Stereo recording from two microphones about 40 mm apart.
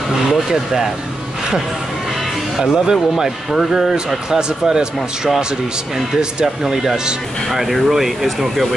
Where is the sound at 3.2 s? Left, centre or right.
Centre.